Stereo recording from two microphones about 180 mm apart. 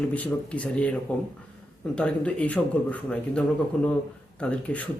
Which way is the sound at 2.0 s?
5° left (ahead or behind).